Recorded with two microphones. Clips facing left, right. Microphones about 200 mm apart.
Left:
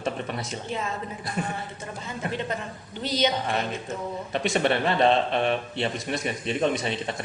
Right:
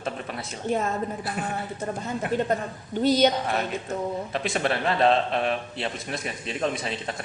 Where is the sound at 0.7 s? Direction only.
45° right (ahead or behind).